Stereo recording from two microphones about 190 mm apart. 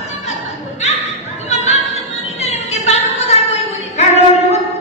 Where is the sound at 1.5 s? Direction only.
35° left (ahead or behind).